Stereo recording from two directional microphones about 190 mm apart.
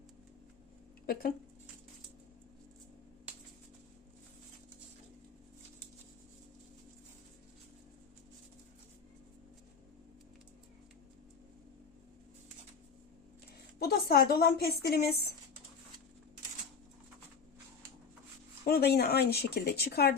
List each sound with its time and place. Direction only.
1.0 s speech: 50° left (ahead or behind)
13.7 s speech: 55° left (ahead or behind)
18.6 s speech: 55° left (ahead or behind)